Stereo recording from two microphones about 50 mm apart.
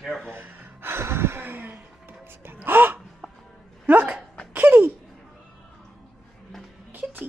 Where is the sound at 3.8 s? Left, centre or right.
Right.